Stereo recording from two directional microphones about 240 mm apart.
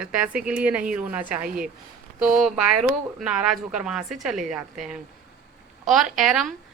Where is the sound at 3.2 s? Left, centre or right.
Centre.